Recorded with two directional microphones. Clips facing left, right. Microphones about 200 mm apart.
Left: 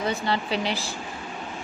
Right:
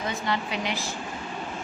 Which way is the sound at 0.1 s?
30° left (ahead or behind).